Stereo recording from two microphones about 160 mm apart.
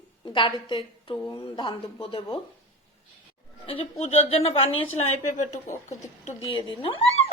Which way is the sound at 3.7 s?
35° left (ahead or behind).